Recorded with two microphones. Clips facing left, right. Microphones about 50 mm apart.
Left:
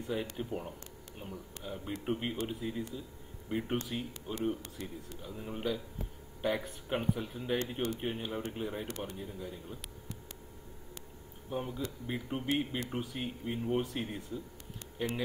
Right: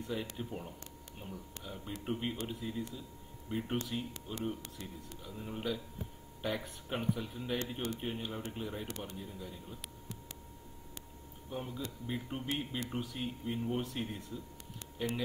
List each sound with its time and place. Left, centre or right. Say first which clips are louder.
0.0 s speech: left 3 dB; centre
6.9 s speech: left 3 dB; centre
11.5 s speech: left 4 dB; centre